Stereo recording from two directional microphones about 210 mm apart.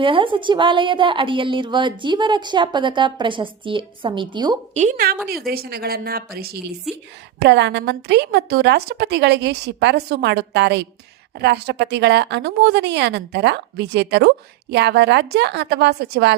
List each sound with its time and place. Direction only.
0.0 s a woman's voice: 25° right (ahead or behind)
4.7 s a woman's voice: 35° right (ahead or behind); by 16.3 s 50° right (ahead or behind)